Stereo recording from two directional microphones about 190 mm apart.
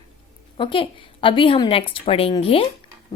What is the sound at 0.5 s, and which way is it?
A woman's voice, 25° left (ahead or behind).